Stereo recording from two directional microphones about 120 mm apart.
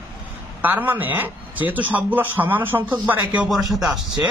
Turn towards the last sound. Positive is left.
turn(degrees=0)  # may be behind; listen again after turning